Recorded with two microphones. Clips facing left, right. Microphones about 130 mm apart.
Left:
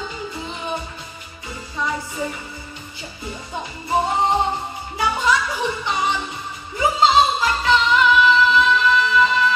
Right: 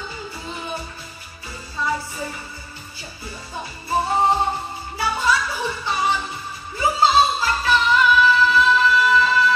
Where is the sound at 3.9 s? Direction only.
20° left (ahead or behind).